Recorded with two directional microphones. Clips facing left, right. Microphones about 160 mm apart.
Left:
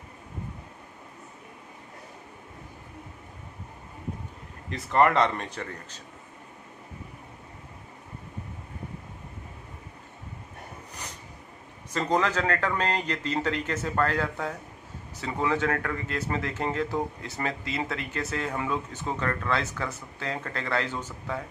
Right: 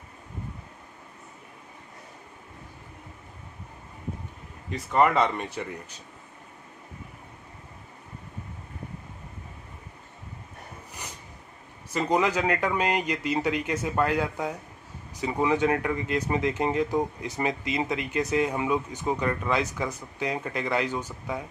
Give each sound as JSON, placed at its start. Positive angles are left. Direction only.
{"t": 4.7, "sound": "speech", "side_deg": 0}
{"t": 11.9, "sound": "speech", "side_deg": -10}